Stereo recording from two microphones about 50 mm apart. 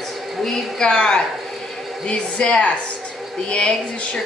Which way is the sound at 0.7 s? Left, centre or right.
Centre.